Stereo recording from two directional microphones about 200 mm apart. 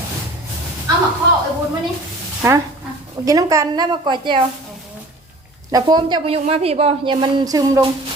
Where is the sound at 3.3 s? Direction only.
15° right (ahead or behind).